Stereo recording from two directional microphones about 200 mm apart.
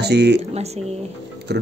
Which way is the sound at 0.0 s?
55° right (ahead or behind).